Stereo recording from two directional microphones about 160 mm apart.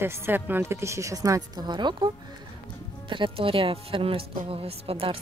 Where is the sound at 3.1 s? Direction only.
35° right (ahead or behind).